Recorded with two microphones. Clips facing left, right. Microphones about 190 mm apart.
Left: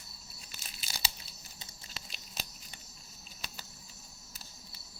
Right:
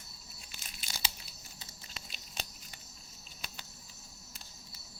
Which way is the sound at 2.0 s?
Centre (ahead or behind).